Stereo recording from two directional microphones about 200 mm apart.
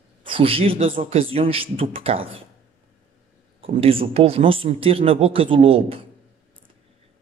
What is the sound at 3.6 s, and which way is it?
Speech, 30° right (ahead or behind).